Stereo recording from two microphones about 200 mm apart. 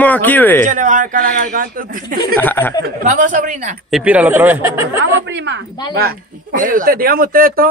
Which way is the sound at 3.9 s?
5° right (ahead or behind).